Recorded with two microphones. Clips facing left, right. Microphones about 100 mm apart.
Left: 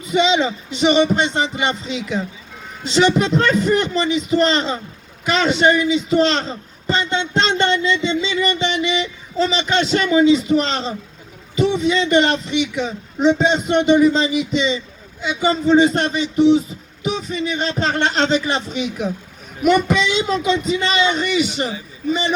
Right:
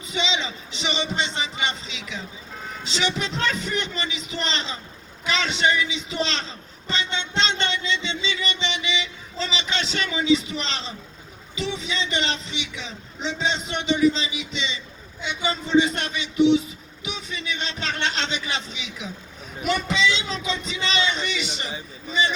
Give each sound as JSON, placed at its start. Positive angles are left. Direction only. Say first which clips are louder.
{"t": 0.0, "sound": "a man's voice", "louder": "left 11 dB", "side_deg": 50}